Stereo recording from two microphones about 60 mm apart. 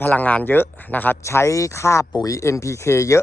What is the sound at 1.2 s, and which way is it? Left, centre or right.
Speech, left.